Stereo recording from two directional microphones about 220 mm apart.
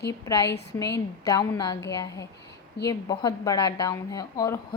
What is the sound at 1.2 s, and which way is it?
A woman's voice, 15° left (ahead or behind).